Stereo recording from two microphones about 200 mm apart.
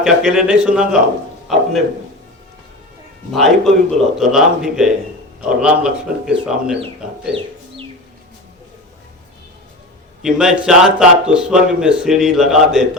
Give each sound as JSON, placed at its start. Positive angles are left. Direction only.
{"t": 0.0, "sound": "speech", "side_deg": -5}
{"t": 1.5, "sound": "a sound", "side_deg": 0}
{"t": 3.3, "sound": "speech", "side_deg": 0}
{"t": 7.3, "sound": "chicken", "side_deg": -25}
{"t": 10.2, "sound": "speech", "side_deg": -5}